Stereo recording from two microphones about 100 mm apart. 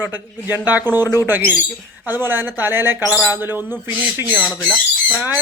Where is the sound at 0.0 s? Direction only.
20° right (ahead or behind).